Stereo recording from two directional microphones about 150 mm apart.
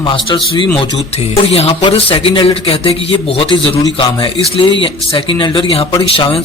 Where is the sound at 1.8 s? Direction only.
35° left (ahead or behind).